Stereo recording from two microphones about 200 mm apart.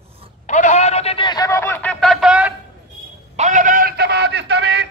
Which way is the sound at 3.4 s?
40° right (ahead or behind).